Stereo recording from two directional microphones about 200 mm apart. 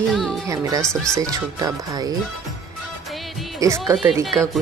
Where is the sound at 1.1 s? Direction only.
15° right (ahead or behind).